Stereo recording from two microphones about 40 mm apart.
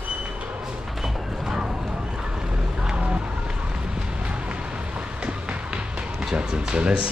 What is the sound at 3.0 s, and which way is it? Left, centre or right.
Vehicle, right.